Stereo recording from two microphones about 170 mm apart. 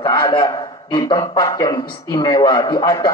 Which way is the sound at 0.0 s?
30° left (ahead or behind).